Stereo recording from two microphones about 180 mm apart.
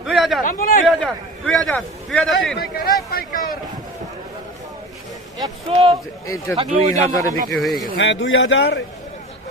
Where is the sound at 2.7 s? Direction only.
55° left (ahead or behind).